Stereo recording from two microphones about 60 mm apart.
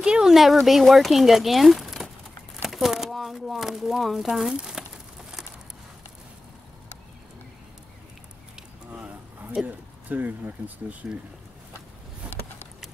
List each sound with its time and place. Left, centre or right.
0.0 s speech: centre
9.6 s speech: centre
10.0 s speech: right